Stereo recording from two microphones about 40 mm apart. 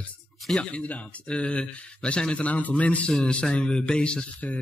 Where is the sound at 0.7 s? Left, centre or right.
Left.